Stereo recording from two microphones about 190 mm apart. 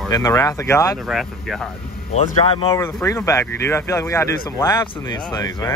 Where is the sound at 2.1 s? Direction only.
35° left (ahead or behind).